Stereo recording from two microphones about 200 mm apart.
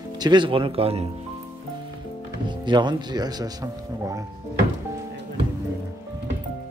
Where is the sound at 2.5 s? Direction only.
25° right (ahead or behind).